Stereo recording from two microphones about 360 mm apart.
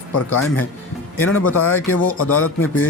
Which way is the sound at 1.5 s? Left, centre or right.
Left.